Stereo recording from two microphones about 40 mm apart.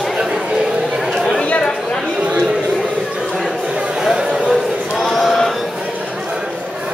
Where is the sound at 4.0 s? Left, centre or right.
Centre.